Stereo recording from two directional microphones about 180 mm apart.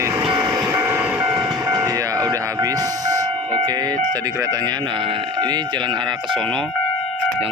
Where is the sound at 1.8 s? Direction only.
20° right (ahead or behind).